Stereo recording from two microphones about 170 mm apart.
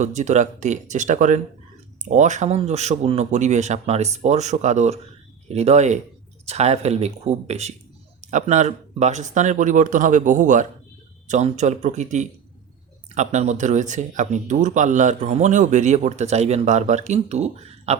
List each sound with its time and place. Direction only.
0.0 s speech: 45° right (ahead or behind)
13.1 s speech: 45° right (ahead or behind)